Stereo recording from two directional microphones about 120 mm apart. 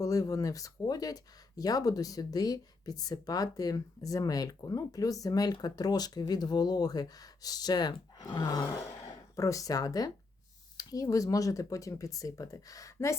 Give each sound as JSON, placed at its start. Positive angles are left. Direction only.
{"t": 0.0, "sound": "speech", "side_deg": 30}